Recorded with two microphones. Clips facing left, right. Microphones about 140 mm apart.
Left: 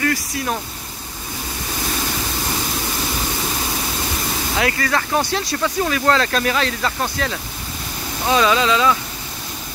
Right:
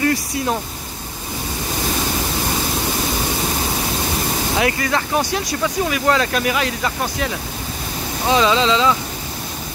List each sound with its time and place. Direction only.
0.0 s speech: 25° right (ahead or behind)
4.6 s speech: 20° right (ahead or behind)